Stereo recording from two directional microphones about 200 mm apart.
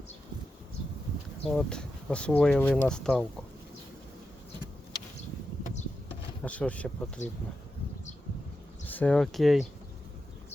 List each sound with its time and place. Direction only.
1.5 s speech: centre (ahead or behind)
6.4 s speech: 5° left (ahead or behind)
7.2 s speech: 35° left (ahead or behind)
8.9 s speech: 5° left (ahead or behind)